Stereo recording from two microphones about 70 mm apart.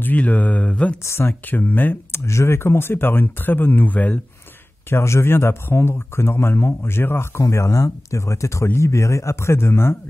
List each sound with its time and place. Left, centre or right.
0.0 s speech: left
1.0 s a man's voice: left
1.5 s speech: left
2.2 s a man's voice: left
4.8 s a man's voice: left
7.5 s a man's voice: left